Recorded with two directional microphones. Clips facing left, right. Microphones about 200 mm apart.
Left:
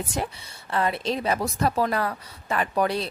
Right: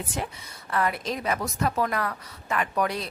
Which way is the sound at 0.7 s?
25° left (ahead or behind).